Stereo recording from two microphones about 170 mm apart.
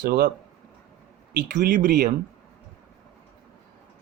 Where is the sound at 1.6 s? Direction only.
50° right (ahead or behind).